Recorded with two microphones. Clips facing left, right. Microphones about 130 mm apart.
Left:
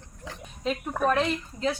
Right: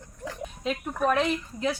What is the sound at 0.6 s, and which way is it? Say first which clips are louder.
A woman's voice: left 1 dB; centre (ahead or behind).